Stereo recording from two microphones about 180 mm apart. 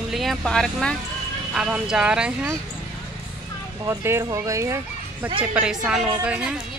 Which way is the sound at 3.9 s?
15° right (ahead or behind).